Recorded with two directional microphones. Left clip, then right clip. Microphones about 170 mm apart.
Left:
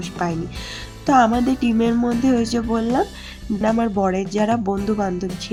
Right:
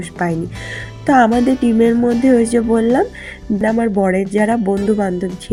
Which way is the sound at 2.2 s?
20° right (ahead or behind).